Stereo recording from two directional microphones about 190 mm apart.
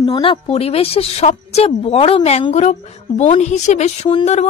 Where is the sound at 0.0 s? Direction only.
25° left (ahead or behind).